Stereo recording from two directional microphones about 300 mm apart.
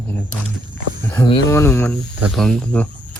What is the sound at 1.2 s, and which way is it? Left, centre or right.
Speech, centre.